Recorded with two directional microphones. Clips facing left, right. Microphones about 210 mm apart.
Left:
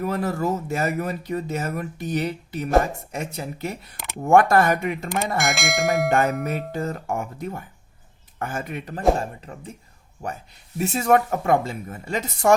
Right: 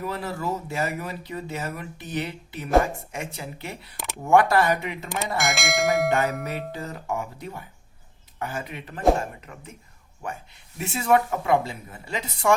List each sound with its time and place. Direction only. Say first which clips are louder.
0.0 s speech: left 6 dB; 45° left (ahead or behind)
5.4 s speech: right 2 dB; centre (ahead or behind)
6.1 s speech: left 3 dB; 50° left (ahead or behind)